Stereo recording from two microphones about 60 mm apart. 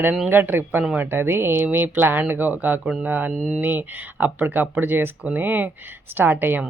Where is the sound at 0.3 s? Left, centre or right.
Right.